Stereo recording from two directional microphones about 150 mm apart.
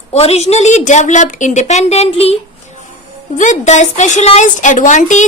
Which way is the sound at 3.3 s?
55° left (ahead or behind).